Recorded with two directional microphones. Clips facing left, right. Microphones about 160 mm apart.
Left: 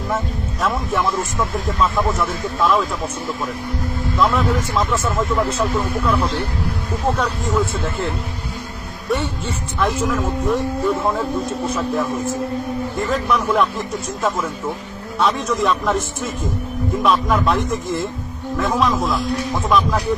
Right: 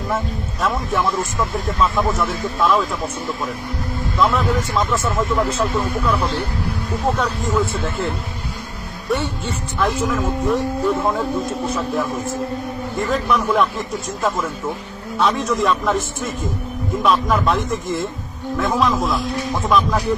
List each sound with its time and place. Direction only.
0.6 s a man's voice: centre (ahead or behind)
4.2 s a man's voice: centre (ahead or behind)